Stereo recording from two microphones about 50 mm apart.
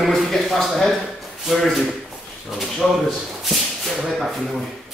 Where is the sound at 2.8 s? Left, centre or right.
Centre.